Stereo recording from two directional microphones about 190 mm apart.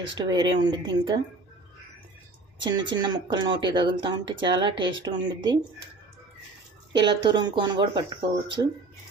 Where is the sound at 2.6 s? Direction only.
20° right (ahead or behind).